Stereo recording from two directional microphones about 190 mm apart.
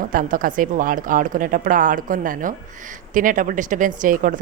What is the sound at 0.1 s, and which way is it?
Speech, 45° right (ahead or behind).